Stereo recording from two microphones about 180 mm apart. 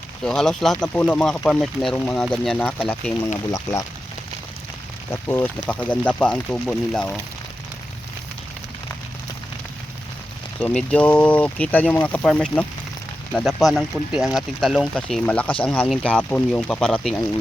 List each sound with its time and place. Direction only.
0.3 s speech: centre (ahead or behind)
3.5 s speech: 20° left (ahead or behind)
5.3 s speech: 10° left (ahead or behind)
10.6 s speech: 5° left (ahead or behind)